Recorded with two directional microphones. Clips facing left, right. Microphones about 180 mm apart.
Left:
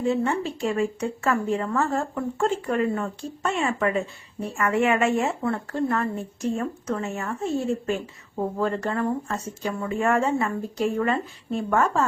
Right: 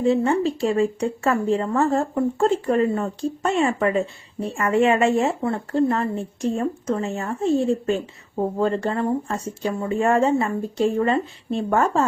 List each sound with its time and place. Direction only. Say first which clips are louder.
0.0 s speech: right 5 dB; 35° right (ahead or behind)